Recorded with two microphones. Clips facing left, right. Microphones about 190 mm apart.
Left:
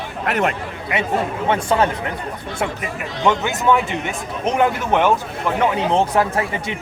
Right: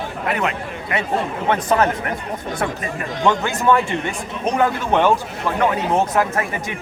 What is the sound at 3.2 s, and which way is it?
Speech, 20° left (ahead or behind).